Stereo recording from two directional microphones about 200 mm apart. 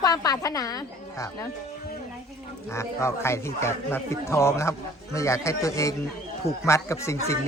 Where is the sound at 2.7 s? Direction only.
15° left (ahead or behind).